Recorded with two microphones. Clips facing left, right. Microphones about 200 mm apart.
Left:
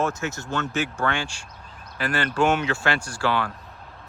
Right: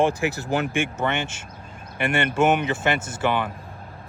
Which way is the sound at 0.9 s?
20° right (ahead or behind).